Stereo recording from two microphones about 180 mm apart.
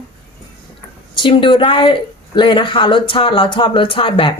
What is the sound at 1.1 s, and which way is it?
A woman's voice, 25° left (ahead or behind).